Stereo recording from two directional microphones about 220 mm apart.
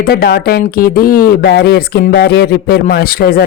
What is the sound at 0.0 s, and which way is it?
Speech, 45° left (ahead or behind).